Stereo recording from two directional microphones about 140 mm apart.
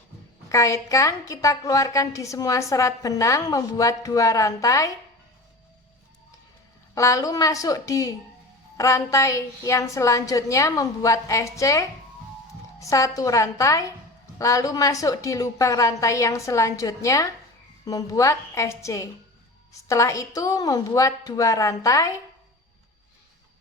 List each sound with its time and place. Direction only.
0.4 s a woman's voice: 20° left (ahead or behind)
6.9 s a woman's voice: 20° left (ahead or behind)